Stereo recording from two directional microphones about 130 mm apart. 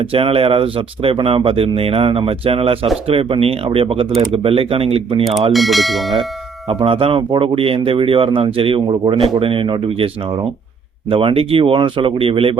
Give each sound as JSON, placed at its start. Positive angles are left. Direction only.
{"t": 0.0, "sound": "speech", "side_deg": -45}
{"t": 5.5, "sound": "speech", "side_deg": 0}
{"t": 6.7, "sound": "speech", "side_deg": -45}